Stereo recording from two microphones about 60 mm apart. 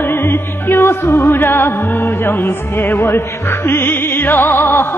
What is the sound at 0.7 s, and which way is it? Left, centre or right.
Music, left.